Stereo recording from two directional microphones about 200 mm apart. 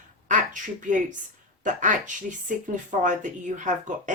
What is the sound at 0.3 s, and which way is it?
Speech, 40° right (ahead or behind).